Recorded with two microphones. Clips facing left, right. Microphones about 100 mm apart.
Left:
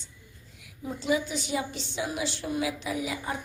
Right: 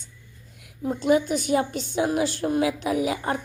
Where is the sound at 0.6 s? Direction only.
55° right (ahead or behind).